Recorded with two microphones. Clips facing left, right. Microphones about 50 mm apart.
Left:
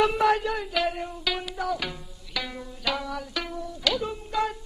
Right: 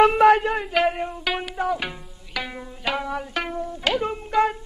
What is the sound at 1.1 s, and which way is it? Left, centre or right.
Music, right.